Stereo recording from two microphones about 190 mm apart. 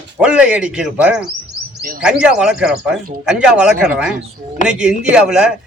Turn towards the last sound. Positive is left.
turn(degrees=-5)  # may be behind; listen again after turning